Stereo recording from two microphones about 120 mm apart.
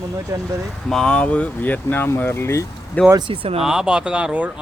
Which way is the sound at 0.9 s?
5° left (ahead or behind).